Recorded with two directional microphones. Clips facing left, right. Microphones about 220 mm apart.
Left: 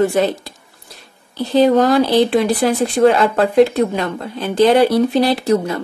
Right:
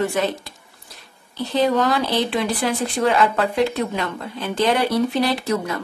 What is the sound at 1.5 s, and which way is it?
Speech, 35° left (ahead or behind).